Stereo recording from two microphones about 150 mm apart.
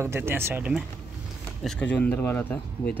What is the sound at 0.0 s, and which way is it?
Speech, 15° right (ahead or behind).